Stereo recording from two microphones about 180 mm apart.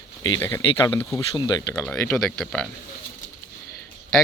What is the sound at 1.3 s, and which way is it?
Speech, 25° left (ahead or behind).